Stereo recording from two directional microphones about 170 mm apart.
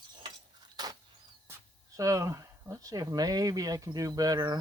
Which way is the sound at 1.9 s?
20° right (ahead or behind).